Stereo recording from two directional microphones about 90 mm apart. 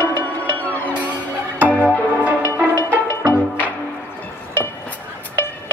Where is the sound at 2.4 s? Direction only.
30° right (ahead or behind).